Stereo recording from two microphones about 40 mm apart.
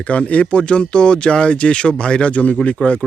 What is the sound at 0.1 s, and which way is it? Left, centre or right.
Speech, left.